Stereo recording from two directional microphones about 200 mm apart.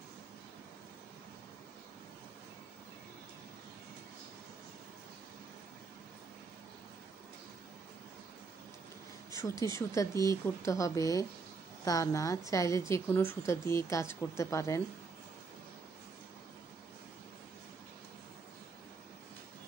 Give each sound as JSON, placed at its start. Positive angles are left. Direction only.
{"t": 9.3, "sound": "a woman's voice", "side_deg": 15}